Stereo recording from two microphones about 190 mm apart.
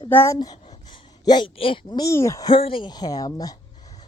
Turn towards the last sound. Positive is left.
turn(degrees=20)  # may be behind; listen again after turning